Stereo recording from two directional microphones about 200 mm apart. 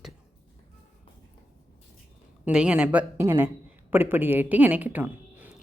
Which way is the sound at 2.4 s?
5° right (ahead or behind).